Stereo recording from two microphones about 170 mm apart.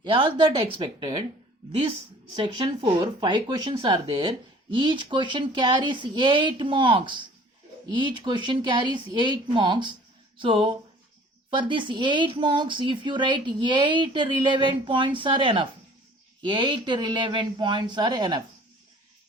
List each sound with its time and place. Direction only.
0.0 s speech: 30° right (ahead or behind)
2.3 s speech: 30° right (ahead or behind)